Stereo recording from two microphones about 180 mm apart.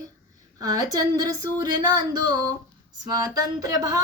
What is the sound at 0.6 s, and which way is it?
Speech, 20° right (ahead or behind).